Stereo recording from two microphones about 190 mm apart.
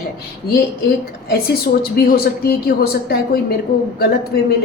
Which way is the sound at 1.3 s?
55° left (ahead or behind).